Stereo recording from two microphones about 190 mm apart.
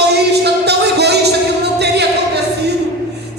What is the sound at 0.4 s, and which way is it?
Music, 60° right (ahead or behind).